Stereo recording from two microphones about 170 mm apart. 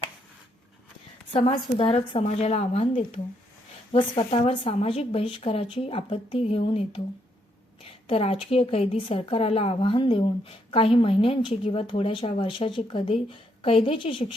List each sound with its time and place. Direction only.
1.3 s speech: 35° left (ahead or behind)
8.0 s speech: 35° left (ahead or behind)